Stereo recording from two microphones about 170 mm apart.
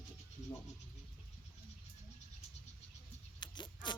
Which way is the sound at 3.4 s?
25° left (ahead or behind).